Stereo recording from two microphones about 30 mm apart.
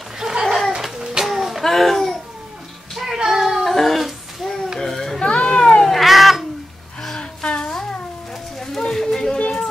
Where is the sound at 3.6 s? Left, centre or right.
Centre.